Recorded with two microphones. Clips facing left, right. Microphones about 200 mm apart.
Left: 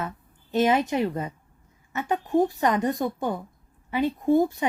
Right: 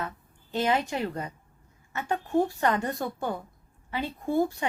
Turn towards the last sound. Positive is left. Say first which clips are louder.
# left 5 dB
turn(degrees=20)  # may be behind; listen again after turning